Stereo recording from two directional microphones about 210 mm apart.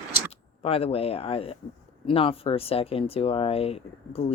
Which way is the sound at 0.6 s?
30° left (ahead or behind).